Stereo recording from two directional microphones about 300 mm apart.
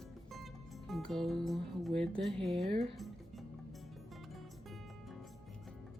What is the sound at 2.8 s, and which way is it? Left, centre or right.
Music, centre.